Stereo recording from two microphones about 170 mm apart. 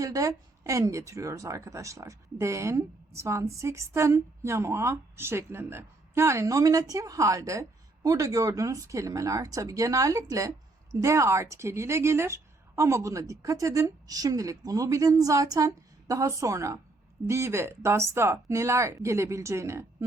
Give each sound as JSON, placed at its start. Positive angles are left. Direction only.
{"t": 0.0, "sound": "speech", "side_deg": -20}